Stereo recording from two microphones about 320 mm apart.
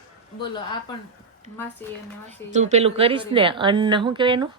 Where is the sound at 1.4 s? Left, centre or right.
Right.